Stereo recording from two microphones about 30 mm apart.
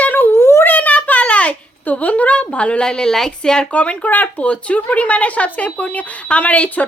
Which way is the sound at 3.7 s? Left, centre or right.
Left.